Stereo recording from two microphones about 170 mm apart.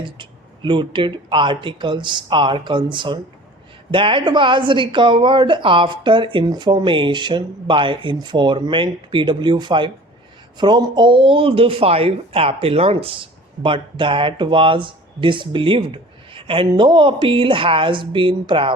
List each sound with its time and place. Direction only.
0.0 s speech: 30° right (ahead or behind)